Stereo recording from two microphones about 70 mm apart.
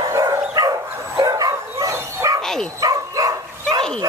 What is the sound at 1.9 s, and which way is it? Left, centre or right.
Bow-wow, right.